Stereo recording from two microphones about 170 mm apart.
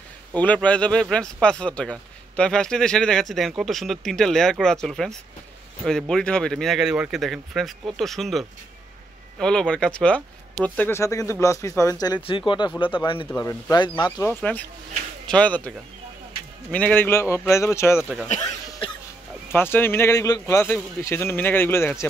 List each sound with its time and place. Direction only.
0.3 s a man's voice: 10° left (ahead or behind); by 13.3 s 30° left (ahead or behind)
13.3 s speech: 20° left (ahead or behind)
15.2 s a man's voice: 5° left (ahead or behind)
16.7 s a man's voice: 10° left (ahead or behind)
17.9 s speech: 5° right (ahead or behind)
19.5 s a man's voice: 10° left (ahead or behind)